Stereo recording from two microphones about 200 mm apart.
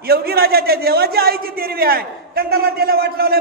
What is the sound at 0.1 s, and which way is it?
A man's voice, 50° right (ahead or behind).